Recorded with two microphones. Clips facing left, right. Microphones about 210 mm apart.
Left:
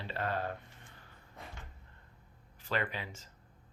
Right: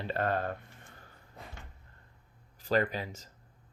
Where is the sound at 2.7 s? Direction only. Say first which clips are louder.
Right 7 dB; 40° right (ahead or behind).